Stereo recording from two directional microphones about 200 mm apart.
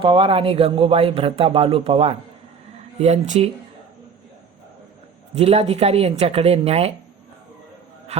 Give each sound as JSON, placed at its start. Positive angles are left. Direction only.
{"t": 0.0, "sound": "a woman's voice", "side_deg": -25}
{"t": 5.3, "sound": "a woman's voice", "side_deg": -30}
{"t": 8.1, "sound": "a woman's voice", "side_deg": -35}